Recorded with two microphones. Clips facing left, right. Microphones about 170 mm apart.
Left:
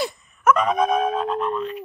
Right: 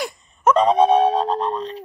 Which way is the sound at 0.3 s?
30° right (ahead or behind).